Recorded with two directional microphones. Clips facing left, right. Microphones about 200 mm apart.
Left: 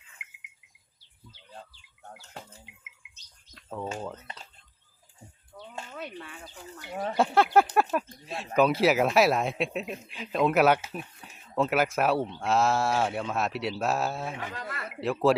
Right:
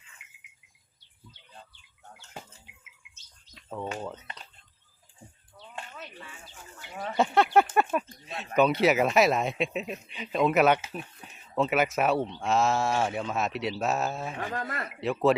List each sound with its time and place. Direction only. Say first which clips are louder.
2.0 s bird: left 4 dB; 40° left (ahead or behind)
3.5 s cricket: even; centre (ahead or behind)
4.0 s speech: even; centre (ahead or behind)
5.5 s a sound: left 3 dB; 50° left (ahead or behind)
6.5 s speech: left 6 dB; 35° left (ahead or behind)
7.2 s speech: even; centre (ahead or behind)
14.3 s speech: right 4 dB; 50° right (ahead or behind)
15.0 s speech: even; centre (ahead or behind)